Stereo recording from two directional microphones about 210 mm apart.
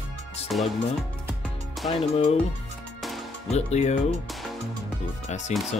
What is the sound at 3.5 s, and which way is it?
Speech, 30° left (ahead or behind).